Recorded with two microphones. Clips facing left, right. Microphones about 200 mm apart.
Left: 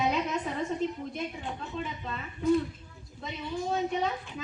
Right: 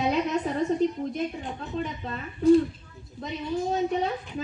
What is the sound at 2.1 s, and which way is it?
Speech, 30° right (ahead or behind).